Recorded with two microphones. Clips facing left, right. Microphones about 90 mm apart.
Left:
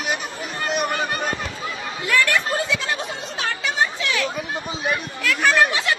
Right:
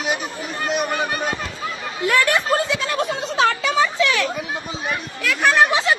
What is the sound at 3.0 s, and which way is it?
Speech, 90° right.